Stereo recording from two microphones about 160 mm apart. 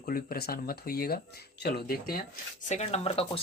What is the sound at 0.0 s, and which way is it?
Speech, 65° left (ahead or behind).